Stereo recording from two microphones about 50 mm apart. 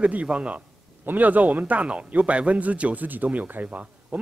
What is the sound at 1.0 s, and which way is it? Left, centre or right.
A man's voice, right.